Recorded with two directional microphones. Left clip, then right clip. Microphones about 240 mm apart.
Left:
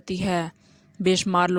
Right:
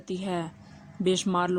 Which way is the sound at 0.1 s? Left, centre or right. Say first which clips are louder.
Left 6 dB; left.